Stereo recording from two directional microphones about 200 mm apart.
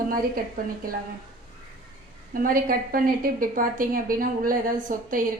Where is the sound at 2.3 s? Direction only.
45° right (ahead or behind).